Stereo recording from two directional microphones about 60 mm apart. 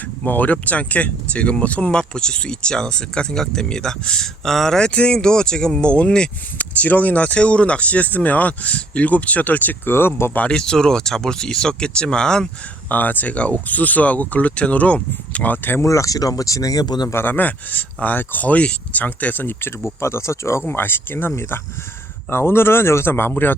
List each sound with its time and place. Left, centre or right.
0.3 s speech: left
6.8 s speech: left
10.3 s speech: centre
12.9 s speech: left
15.5 s speech: left
15.8 s speech: left
17.2 s speech: left
20.0 s speech: left
20.7 s speech: left